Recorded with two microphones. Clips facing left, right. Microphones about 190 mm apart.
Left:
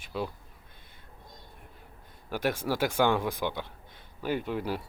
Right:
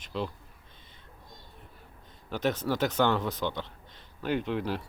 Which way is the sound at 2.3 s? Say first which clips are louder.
Right 1 dB; 10° left (ahead or behind).